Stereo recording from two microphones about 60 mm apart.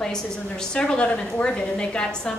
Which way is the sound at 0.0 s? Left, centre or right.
Centre.